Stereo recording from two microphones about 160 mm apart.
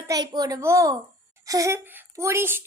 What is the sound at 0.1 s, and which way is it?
A child's voice, 25° right (ahead or behind).